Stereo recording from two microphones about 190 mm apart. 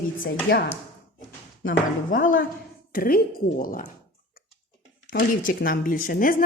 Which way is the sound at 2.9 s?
50° left (ahead or behind).